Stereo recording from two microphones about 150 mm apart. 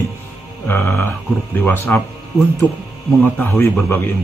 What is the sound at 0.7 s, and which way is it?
Speech, 15° left (ahead or behind).